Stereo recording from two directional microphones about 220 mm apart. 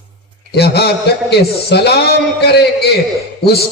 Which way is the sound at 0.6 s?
45° left (ahead or behind).